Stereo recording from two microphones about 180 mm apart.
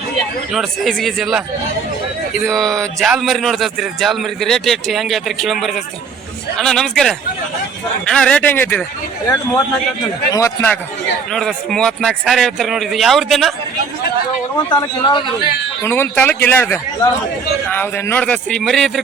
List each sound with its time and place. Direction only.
0.5 s speech: centre (ahead or behind)
2.4 s a man's voice: centre (ahead or behind)
10.3 s a man's voice: 15° left (ahead or behind)
11.3 s speech: centre (ahead or behind)
14.7 s speech: 25° left (ahead or behind)
15.8 s a man's voice: 10° left (ahead or behind)